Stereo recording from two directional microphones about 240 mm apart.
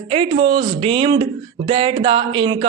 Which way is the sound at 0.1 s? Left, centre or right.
Right.